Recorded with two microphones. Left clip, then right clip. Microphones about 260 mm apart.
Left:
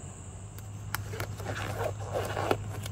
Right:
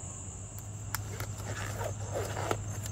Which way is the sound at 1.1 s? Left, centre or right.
Left.